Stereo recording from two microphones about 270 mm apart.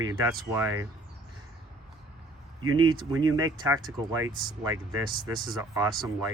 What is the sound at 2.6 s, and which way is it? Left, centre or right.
Speech, right.